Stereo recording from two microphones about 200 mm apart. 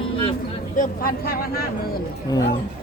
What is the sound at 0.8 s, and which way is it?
Speech, 45° left (ahead or behind).